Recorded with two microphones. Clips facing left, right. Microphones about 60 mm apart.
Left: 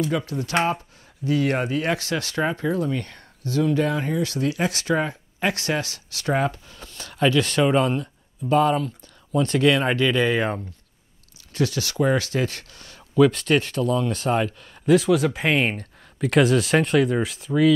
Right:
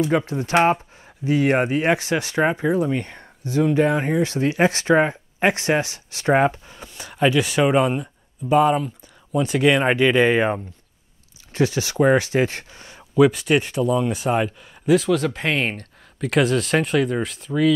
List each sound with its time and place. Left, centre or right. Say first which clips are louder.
0.1 s speech: right 5 dB; right
13.1 s speech: right 1 dB; centre
15.0 s speech: left 1 dB; centre